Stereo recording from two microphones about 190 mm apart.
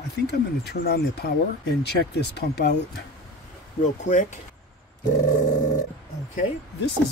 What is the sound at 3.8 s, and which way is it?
Speech, 40° left (ahead or behind).